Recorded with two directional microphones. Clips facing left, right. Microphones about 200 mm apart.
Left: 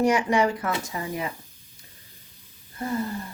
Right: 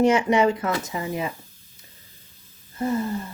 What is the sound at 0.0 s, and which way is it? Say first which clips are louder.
Speech: right 3 dB; 25° right (ahead or behind).